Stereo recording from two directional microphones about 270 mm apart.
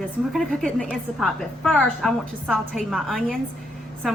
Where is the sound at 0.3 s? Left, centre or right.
Centre.